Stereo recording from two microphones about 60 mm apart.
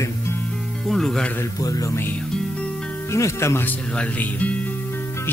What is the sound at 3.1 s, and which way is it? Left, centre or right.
Speech, left.